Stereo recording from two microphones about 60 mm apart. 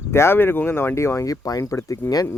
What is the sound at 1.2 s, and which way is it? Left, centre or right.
Speech, left.